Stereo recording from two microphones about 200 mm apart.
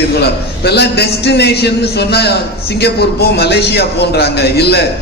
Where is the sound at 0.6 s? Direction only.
55° left (ahead or behind).